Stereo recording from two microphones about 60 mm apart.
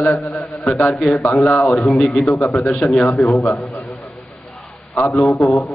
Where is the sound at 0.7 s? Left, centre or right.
Left.